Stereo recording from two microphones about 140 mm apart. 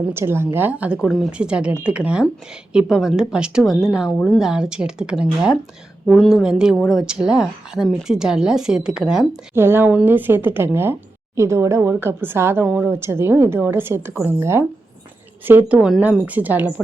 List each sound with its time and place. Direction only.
0.1 s a woman's voice: 15° right (ahead or behind)
9.6 s a woman's voice: 15° right (ahead or behind)